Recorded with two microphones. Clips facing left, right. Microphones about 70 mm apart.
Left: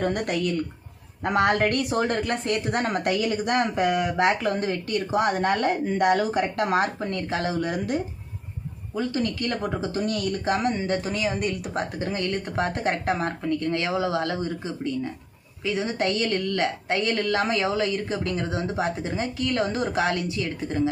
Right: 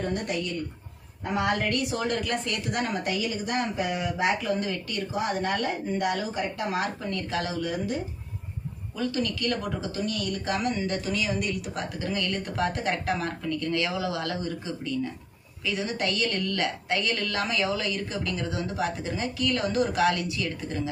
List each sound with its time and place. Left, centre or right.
0.0 s a woman's voice: left
5.1 s a woman's voice: left
7.6 s speech: left
9.0 s speech: left
10.0 s a woman's voice: left
10.4 s speech: left